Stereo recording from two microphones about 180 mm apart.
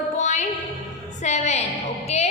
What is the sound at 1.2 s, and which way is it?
A woman's voice, 40° left (ahead or behind).